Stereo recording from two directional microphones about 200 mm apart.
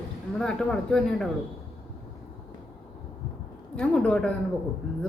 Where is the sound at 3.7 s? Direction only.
5° left (ahead or behind).